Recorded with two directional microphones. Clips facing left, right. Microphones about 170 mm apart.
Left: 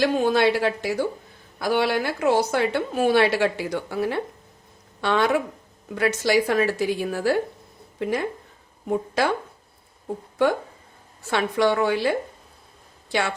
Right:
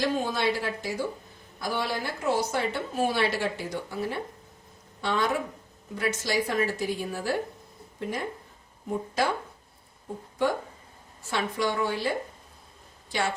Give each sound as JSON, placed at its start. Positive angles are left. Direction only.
{"t": 0.0, "sound": "a woman's voice", "side_deg": 75}
{"t": 11.3, "sound": "a woman's voice", "side_deg": 70}